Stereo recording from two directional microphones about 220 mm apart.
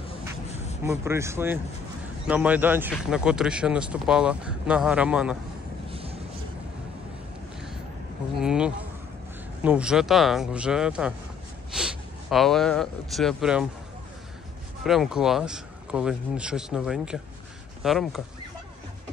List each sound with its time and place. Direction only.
0.8 s speech: 10° right (ahead or behind)
5.9 s a sound: 25° right (ahead or behind)
8.4 s speech: 5° right (ahead or behind)
14.8 s speech: centre (ahead or behind)